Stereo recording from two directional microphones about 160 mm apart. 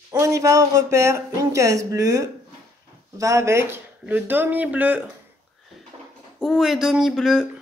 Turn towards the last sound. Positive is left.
turn(degrees=0)  # may be behind; listen again after turning